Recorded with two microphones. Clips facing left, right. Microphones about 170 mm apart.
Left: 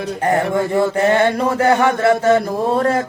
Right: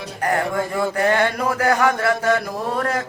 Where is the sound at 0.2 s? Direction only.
25° left (ahead or behind).